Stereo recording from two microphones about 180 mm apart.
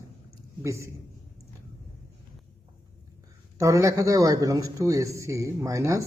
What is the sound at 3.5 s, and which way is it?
A man's voice, 20° right (ahead or behind).